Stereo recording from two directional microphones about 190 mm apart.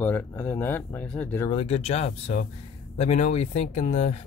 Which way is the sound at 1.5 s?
30° left (ahead or behind).